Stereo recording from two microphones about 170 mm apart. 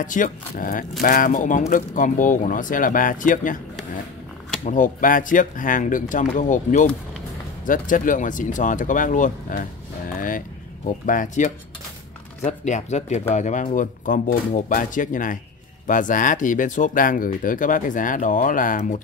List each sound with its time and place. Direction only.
0.0 s speech: 50° left (ahead or behind)
4.6 s speech: 50° left (ahead or behind)
10.1 s vehicle: 55° left (ahead or behind)
11.1 s speech: 50° left (ahead or behind)